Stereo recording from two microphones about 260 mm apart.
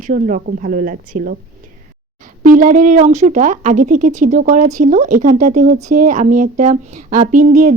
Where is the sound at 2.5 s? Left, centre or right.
Right.